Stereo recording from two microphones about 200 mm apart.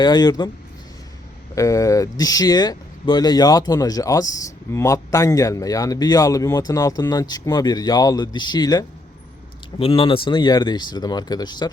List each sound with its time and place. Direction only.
0.0 s speech: 20° left (ahead or behind)
1.5 s speech: 15° left (ahead or behind)